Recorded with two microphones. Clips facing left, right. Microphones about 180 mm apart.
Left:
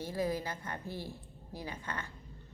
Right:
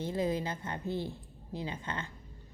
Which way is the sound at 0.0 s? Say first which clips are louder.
Right 3 dB; 20° right (ahead or behind).